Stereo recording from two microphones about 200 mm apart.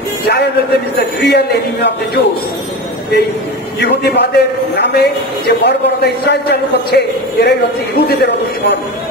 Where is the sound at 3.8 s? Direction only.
55° left (ahead or behind).